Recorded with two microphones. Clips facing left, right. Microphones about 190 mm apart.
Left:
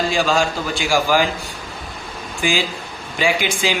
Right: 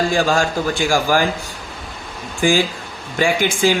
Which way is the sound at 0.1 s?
45° right (ahead or behind).